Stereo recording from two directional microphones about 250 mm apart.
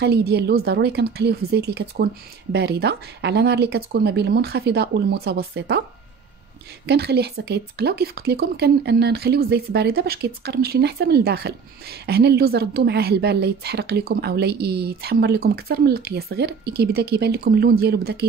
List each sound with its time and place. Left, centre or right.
0.0 s speech: right
6.9 s speech: right